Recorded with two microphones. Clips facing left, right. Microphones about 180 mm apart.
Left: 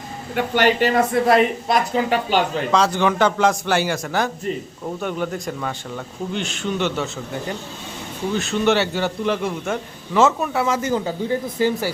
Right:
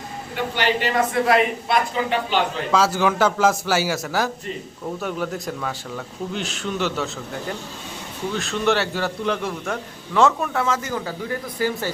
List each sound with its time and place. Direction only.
0.3 s a woman's voice: 50° left (ahead or behind)
2.7 s a man's voice: 5° right (ahead or behind)
10.8 s speech: 20° left (ahead or behind)